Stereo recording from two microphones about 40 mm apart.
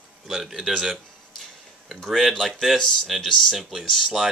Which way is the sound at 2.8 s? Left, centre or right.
Centre.